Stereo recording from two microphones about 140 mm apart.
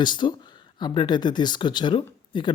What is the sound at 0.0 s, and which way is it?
Speech, 35° left (ahead or behind).